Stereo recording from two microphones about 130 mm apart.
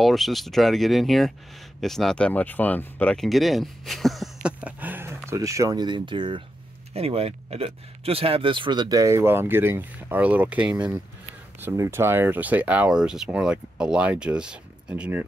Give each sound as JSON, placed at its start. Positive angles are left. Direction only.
{"t": 0.0, "sound": "speech", "side_deg": 0}
{"t": 6.9, "sound": "speech", "side_deg": -50}
{"t": 11.6, "sound": "speech", "side_deg": -20}